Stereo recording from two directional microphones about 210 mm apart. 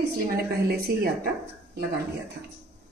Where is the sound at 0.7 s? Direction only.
45° right (ahead or behind).